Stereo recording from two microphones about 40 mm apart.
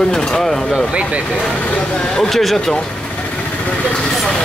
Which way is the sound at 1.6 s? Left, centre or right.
Left.